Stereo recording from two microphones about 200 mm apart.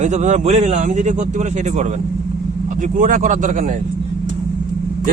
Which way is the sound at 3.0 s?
40° right (ahead or behind).